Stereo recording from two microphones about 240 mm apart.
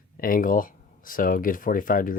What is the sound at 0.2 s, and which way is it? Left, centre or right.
Speech, left.